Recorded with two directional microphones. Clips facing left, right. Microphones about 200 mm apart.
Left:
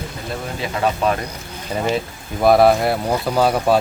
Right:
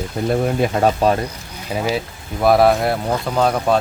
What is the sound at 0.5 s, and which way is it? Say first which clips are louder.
Speech: right 5 dB; 40° right (ahead or behind).